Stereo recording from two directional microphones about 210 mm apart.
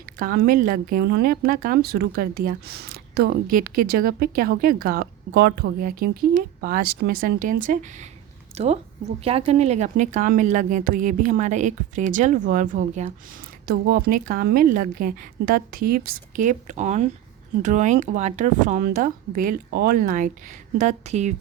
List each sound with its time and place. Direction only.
0.0 s a woman's voice: 45° right (ahead or behind)
13.7 s a woman's voice: 45° right (ahead or behind)